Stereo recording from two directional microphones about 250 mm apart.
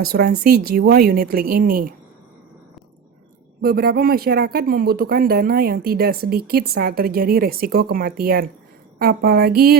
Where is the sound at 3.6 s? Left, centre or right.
Right.